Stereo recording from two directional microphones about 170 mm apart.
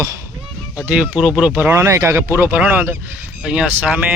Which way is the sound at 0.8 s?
5° right (ahead or behind).